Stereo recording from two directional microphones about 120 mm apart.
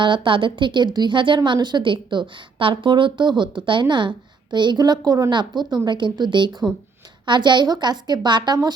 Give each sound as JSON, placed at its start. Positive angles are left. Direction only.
{"t": 0.0, "sound": "a woman's voice", "side_deg": -45}